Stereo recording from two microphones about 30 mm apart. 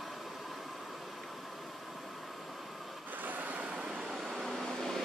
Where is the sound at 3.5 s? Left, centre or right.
Right.